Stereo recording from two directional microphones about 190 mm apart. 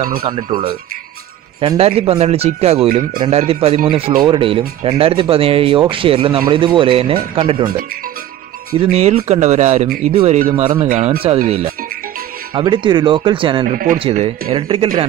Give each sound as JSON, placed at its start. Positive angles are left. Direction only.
{"t": 0.2, "sound": "speech", "side_deg": -25}
{"t": 8.7, "sound": "speech", "side_deg": -30}